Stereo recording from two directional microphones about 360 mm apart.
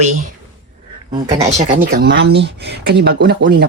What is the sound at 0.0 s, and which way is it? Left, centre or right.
A woman's voice, centre.